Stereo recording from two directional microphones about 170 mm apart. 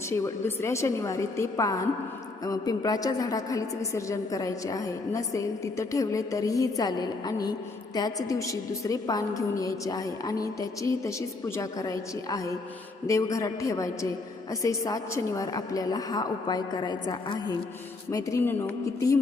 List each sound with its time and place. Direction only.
0.1 s a woman's voice: 15° left (ahead or behind)